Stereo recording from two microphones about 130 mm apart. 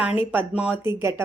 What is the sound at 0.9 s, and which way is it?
Speech, 20° right (ahead or behind).